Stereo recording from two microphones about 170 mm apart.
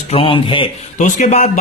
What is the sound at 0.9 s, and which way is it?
Speech, 45° left (ahead or behind).